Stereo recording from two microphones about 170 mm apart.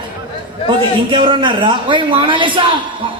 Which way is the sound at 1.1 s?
30° right (ahead or behind).